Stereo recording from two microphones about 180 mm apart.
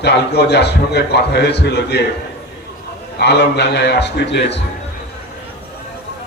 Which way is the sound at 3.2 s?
70° left (ahead or behind).